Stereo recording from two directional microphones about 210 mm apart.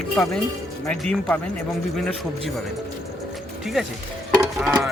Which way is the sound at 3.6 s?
Centre (ahead or behind).